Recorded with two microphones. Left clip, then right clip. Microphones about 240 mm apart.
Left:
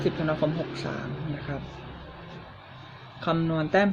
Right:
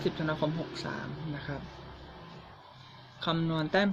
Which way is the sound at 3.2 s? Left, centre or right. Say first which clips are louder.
Left 5 dB; centre.